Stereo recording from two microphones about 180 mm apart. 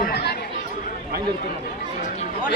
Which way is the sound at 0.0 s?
60° left (ahead or behind).